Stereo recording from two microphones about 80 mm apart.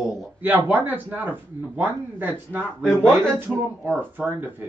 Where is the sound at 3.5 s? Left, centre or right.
Right.